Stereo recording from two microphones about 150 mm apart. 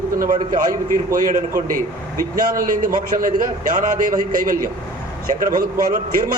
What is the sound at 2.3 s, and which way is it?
A man's voice, 70° right (ahead or behind).